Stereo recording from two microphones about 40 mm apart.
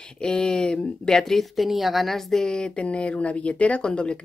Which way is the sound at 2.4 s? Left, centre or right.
Centre.